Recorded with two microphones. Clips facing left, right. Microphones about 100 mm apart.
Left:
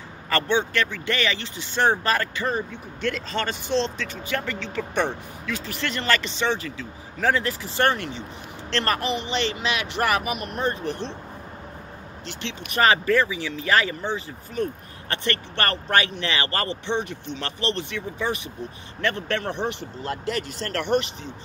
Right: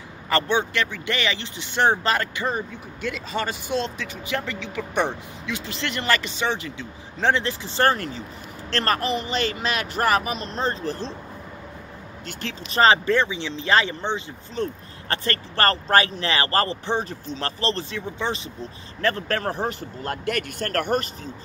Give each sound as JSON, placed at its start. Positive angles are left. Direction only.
{"t": 0.3, "sound": "speech", "side_deg": -15}
{"t": 12.3, "sound": "speech", "side_deg": -45}
{"t": 12.6, "sound": "speech", "side_deg": -30}